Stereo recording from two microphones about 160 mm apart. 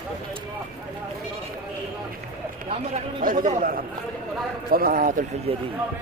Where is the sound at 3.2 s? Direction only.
60° right (ahead or behind).